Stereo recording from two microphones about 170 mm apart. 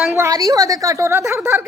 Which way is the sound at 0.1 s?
20° right (ahead or behind).